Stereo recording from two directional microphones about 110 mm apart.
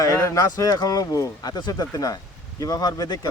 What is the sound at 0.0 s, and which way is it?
Speech, 30° left (ahead or behind).